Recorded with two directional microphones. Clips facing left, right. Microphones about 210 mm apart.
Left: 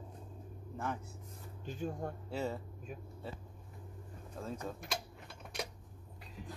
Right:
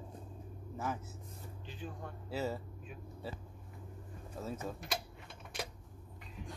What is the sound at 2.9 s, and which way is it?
Speech, 40° left (ahead or behind).